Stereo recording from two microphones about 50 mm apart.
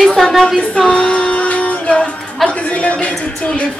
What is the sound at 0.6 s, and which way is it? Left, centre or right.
Music, centre.